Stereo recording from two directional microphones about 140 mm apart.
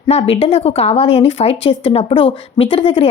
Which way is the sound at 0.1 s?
45° left (ahead or behind).